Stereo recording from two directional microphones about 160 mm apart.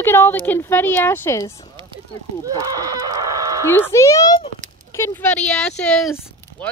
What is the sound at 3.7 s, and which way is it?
Speech, 15° left (ahead or behind).